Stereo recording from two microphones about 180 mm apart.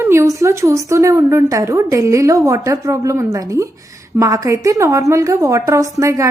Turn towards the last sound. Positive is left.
turn(degrees=-15)  # may be behind; listen again after turning